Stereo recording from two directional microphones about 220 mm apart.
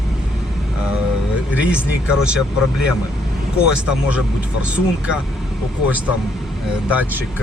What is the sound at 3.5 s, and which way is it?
Speech, 5° right (ahead or behind).